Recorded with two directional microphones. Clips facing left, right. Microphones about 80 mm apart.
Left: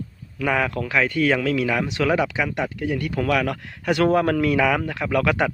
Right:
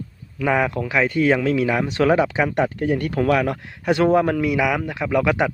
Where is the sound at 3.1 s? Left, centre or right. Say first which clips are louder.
Right 2 dB; right.